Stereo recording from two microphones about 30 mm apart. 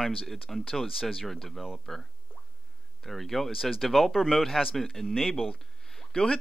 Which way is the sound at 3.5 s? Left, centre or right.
Centre.